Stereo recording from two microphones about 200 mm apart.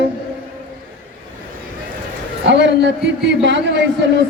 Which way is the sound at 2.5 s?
60° right (ahead or behind).